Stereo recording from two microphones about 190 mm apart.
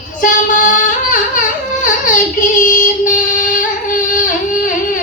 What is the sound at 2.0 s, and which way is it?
Child singing, 45° left (ahead or behind).